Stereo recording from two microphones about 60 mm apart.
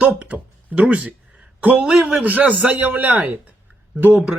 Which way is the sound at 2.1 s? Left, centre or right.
Right.